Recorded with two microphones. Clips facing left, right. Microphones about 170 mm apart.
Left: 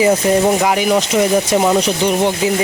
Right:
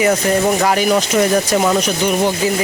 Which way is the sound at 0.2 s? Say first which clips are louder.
Left 2 dB; 25° left (ahead or behind).